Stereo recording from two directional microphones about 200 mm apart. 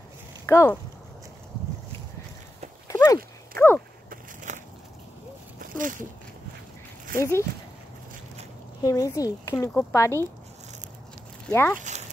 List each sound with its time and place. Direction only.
0.5 s speech: 15° left (ahead or behind)
2.9 s horse: 15° left (ahead or behind)
3.5 s speech: 10° left (ahead or behind)
4.1 s a sound: 40° right (ahead or behind)
5.6 s a sound: 40° right (ahead or behind)
7.2 s speech: 15° left (ahead or behind)
8.8 s speech: 15° left (ahead or behind)
11.4 s speech: 10° left (ahead or behind)
11.8 s a sound: 35° right (ahead or behind)